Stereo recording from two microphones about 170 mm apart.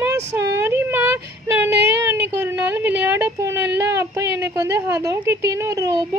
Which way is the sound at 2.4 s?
10° right (ahead or behind).